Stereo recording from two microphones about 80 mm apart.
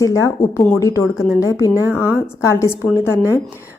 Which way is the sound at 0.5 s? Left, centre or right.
Left.